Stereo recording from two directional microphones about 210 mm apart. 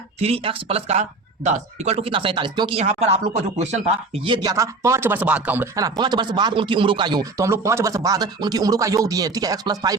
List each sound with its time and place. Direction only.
0.2 s speech: 25° right (ahead or behind)